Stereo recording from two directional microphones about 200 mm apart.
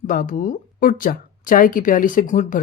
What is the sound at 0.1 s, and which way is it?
Speech, 45° left (ahead or behind).